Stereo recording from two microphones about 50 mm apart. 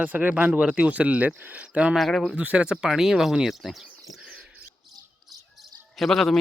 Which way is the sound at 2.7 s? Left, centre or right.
Centre.